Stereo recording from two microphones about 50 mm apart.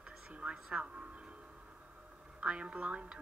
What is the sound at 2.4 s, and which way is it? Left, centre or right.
Speech, right.